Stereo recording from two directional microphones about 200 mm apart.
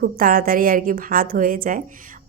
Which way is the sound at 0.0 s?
45° right (ahead or behind).